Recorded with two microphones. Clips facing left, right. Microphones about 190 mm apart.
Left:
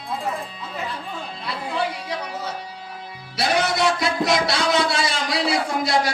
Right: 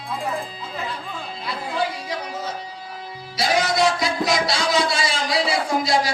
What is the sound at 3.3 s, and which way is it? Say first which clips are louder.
Music: right 1 dB; 60° left (ahead or behind).